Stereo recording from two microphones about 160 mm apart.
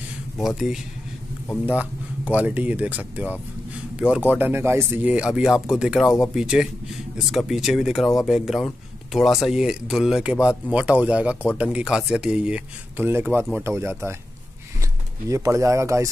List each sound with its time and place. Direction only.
0.4 s speech: centre (ahead or behind); by 16.1 s 20° right (ahead or behind)